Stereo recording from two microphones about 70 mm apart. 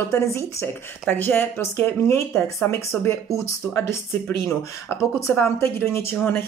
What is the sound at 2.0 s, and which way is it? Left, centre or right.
Speech, left.